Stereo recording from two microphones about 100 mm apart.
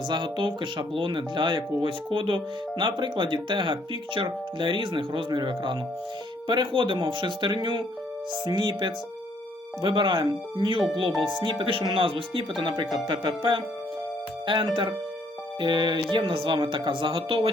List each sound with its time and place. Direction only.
0.1 s speech: 55° right (ahead or behind)